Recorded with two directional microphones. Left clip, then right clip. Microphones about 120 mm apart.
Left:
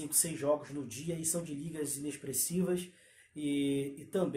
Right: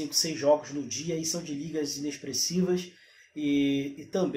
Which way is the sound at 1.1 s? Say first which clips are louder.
Right 7 dB; 20° right (ahead or behind).